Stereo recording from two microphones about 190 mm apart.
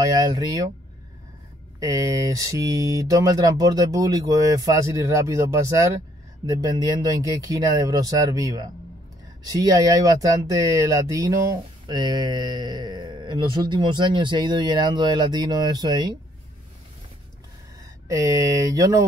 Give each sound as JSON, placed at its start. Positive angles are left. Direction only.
{"t": 0.0, "sound": "speech", "side_deg": -20}
{"t": 1.8, "sound": "speech", "side_deg": -15}
{"t": 18.0, "sound": "speech", "side_deg": -15}